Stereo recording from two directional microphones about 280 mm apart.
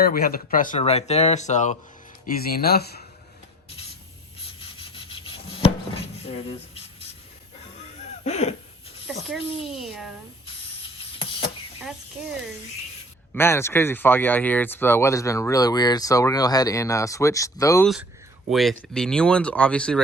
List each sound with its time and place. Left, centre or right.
0.0 s speech: left
4.9 s rub: centre
8.2 s a sound: left
9.2 s speech: centre
13.3 s speech: centre